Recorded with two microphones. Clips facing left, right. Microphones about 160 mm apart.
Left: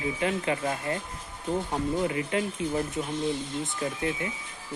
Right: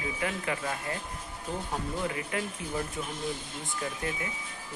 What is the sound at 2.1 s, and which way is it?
Speech, 25° left (ahead or behind).